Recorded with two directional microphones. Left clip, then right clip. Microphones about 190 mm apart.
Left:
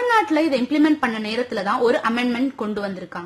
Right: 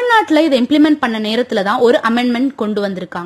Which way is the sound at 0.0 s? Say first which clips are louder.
Right 6 dB; 35° right (ahead or behind).